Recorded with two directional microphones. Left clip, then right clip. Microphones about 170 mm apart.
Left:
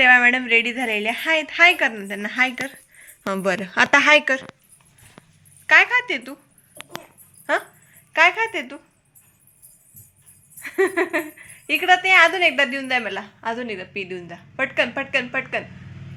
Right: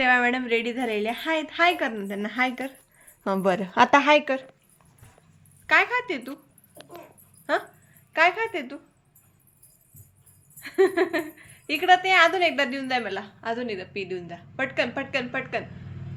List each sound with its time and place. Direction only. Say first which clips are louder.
0.0 s a woman's voice: left 7 dB; 5° left (ahead or behind)
5.6 s a woman's voice: left 6 dB; centre (ahead or behind)
7.5 s a woman's voice: left 4 dB; centre (ahead or behind)
10.6 s speech: left 1 dB; 15° left (ahead or behind)